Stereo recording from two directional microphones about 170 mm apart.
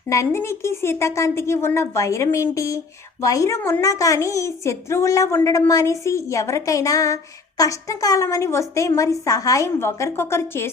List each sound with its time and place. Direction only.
0.1 s a woman's voice: 15° left (ahead or behind)